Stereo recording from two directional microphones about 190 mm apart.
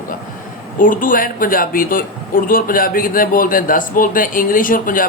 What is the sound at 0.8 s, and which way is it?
A man's voice, 45° left (ahead or behind).